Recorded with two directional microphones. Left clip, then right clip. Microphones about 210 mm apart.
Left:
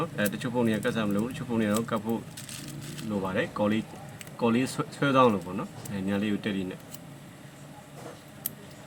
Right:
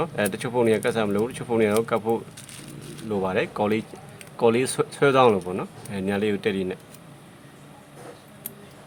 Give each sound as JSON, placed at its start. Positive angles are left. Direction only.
{"t": 0.0, "sound": "speech", "side_deg": -50}
{"t": 3.2, "sound": "speech", "side_deg": -50}